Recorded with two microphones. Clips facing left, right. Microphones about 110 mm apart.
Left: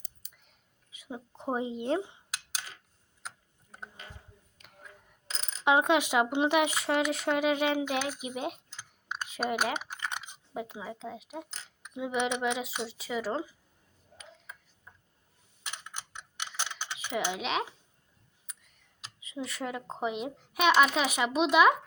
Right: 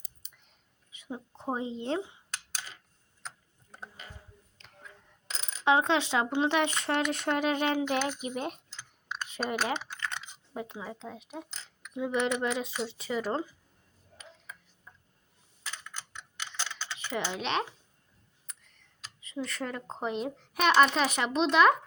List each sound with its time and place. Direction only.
0.2 s whispering: 5° left (ahead or behind)
0.9 s a sound: 5° left (ahead or behind)
1.4 s speech: 15° left (ahead or behind)
4.6 s a sound: 15° left (ahead or behind)
5.6 s speech: 15° left (ahead or behind)
7.9 s computer keyboard: 5° left (ahead or behind)
10.5 s speech: 5° left (ahead or behind)
15.6 s typing: 20° left (ahead or behind)
18.5 s computer keyboard: 5° left (ahead or behind)
19.4 s speech: 10° left (ahead or behind)